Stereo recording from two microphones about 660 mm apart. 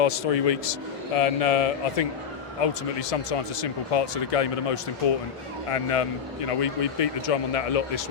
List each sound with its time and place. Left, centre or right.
0.0 s speech: left